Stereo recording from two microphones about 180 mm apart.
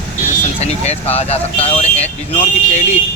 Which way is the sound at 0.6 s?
35° left (ahead or behind).